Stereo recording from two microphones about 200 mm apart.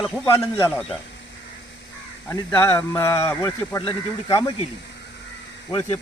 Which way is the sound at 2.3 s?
10° left (ahead or behind).